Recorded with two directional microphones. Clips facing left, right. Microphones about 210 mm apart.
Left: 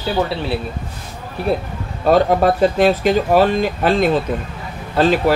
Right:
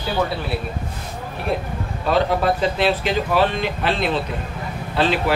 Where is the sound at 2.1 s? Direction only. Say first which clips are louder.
Left 5 dB; 45° left (ahead or behind).